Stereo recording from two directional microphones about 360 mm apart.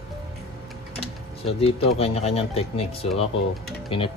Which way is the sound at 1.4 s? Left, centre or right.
Centre.